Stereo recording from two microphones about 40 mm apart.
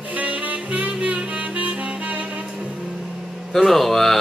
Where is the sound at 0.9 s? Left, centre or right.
Right.